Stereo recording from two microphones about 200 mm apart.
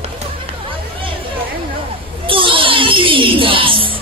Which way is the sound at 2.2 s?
25° right (ahead or behind).